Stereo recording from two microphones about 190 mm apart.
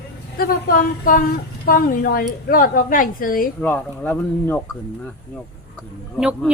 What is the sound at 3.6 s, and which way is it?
Speech, 10° left (ahead or behind).